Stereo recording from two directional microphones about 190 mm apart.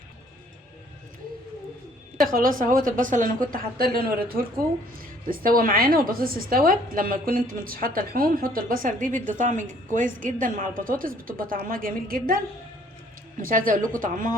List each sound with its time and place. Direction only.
2.1 s a woman's voice: 50° right (ahead or behind)
13.4 s a woman's voice: 45° right (ahead or behind)